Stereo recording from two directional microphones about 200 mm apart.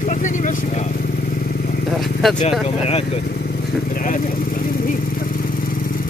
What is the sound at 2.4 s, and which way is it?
Speech, 30° left (ahead or behind).